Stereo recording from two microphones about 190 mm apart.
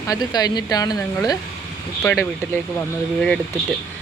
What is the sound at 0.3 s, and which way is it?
Speech, 20° left (ahead or behind).